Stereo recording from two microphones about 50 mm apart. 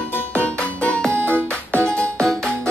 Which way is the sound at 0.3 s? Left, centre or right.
Left.